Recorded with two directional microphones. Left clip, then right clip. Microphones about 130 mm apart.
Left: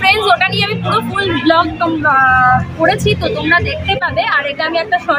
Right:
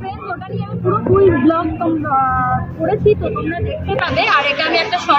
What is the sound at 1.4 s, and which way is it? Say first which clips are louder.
Speech: left 4 dB; 90° left.